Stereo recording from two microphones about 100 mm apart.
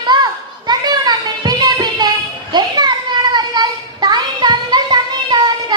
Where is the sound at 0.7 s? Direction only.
45° right (ahead or behind).